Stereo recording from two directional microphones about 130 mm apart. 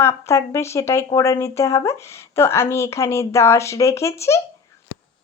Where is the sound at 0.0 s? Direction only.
20° left (ahead or behind).